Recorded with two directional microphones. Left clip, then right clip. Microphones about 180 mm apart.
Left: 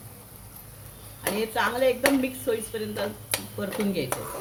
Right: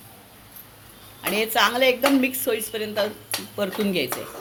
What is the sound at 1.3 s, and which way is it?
Speech, 50° right (ahead or behind).